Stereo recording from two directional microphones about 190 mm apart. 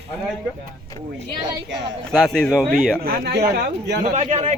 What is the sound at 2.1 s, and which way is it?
Speech, centre (ahead or behind).